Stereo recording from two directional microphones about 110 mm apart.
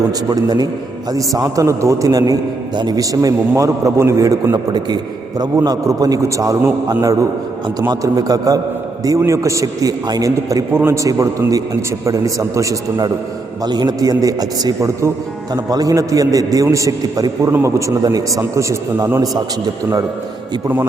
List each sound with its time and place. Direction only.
0.1 s a man's voice: 35° right (ahead or behind)
13.7 s a man's voice: 40° right (ahead or behind)